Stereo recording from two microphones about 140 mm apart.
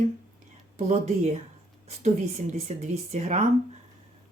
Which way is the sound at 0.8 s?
55° right (ahead or behind).